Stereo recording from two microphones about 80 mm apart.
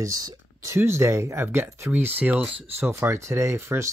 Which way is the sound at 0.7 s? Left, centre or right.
Right.